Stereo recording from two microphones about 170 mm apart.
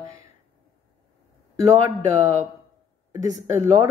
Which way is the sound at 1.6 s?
20° right (ahead or behind).